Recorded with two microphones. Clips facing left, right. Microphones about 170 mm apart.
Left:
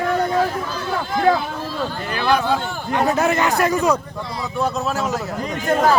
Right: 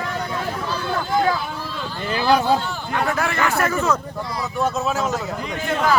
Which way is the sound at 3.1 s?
20° left (ahead or behind).